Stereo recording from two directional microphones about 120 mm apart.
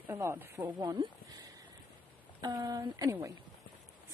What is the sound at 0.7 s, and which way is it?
Speech, 35° right (ahead or behind).